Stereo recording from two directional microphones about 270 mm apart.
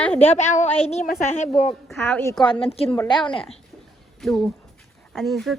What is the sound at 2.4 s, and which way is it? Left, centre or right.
A woman's voice, centre.